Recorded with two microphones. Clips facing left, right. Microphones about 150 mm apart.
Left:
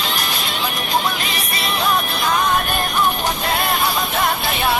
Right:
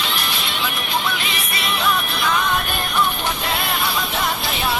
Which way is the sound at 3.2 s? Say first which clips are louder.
Left 3 dB; 40° left (ahead or behind).